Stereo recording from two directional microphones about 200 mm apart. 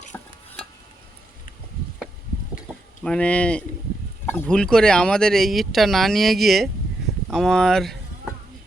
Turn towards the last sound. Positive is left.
turn(degrees=0)  # may be behind; listen again after turning